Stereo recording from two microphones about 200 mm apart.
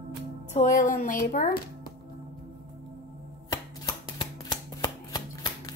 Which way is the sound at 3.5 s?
20° left (ahead or behind).